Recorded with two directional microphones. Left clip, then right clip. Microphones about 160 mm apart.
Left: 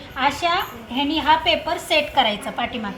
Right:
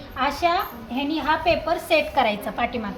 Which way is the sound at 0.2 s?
25° right (ahead or behind).